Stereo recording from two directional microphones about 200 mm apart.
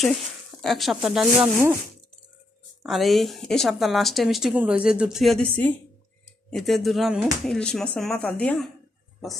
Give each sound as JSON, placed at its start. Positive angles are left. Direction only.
{"t": 0.6, "sound": "speech", "side_deg": 0}
{"t": 2.8, "sound": "speech", "side_deg": 0}